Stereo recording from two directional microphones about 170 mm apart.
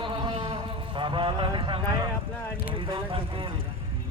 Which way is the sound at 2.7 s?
30° right (ahead or behind).